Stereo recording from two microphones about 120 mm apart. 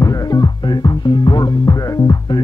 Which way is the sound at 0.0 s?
35° left (ahead or behind).